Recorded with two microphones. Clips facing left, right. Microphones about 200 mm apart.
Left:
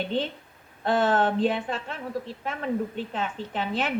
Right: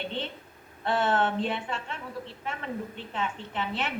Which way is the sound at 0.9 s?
40° left (ahead or behind).